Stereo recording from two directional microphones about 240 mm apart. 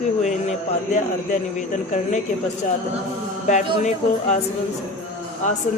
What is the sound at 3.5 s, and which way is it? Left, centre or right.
Speech, left.